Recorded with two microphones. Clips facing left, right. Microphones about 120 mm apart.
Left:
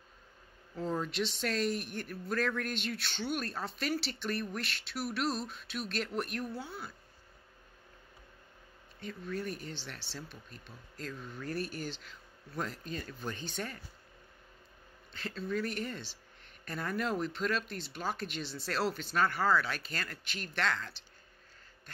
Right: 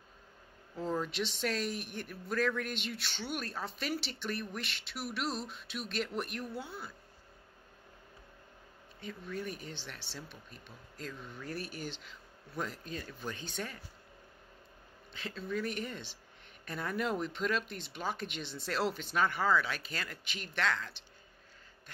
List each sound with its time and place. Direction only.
1.1 s speech: 10° right (ahead or behind)
9.5 s speech: 10° right (ahead or behind)
15.1 s speech: centre (ahead or behind)